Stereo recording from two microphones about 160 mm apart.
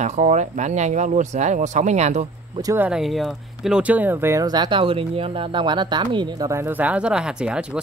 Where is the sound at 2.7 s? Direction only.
5° right (ahead or behind).